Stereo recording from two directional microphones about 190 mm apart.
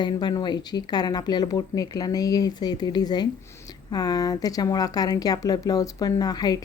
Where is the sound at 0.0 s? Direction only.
20° left (ahead or behind).